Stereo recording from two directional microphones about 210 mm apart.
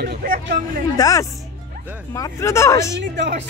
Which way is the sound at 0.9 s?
15° left (ahead or behind).